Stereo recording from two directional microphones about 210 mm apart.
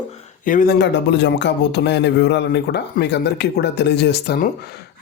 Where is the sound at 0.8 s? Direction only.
55° left (ahead or behind).